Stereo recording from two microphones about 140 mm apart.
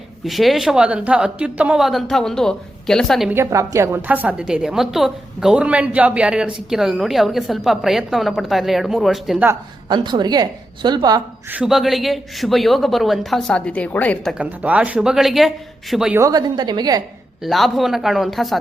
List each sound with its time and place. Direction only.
0.3 s speech: centre (ahead or behind)
3.2 s a woman's voice: 20° right (ahead or behind); by 9.4 s centre (ahead or behind)
9.9 s a woman's voice: 30° right (ahead or behind)
11.5 s speech: 5° right (ahead or behind)
14.3 s speech: 10° right (ahead or behind)
16.1 s a woman's voice: 25° right (ahead or behind)
17.4 s speech: centre (ahead or behind)